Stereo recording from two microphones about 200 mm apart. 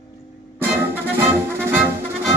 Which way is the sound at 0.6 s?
10° right (ahead or behind).